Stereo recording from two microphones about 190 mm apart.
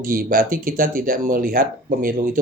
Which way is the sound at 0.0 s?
50° right (ahead or behind).